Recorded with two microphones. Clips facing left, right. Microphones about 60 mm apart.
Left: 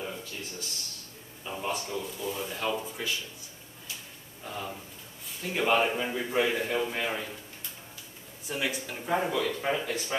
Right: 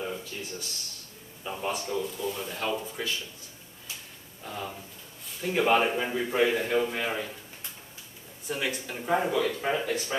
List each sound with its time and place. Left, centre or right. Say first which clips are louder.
0.0 s a sound: right 3 dB; centre
1.4 s a man's voice: right 1 dB; centre
4.5 s a man's voice: right 1 dB; centre
8.5 s a man's voice: right 1 dB; centre